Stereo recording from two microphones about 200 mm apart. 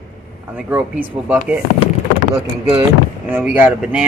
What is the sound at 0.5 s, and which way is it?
Speech, 10° right (ahead or behind).